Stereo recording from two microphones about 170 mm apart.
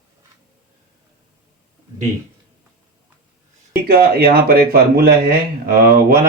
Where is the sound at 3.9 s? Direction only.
60° right (ahead or behind).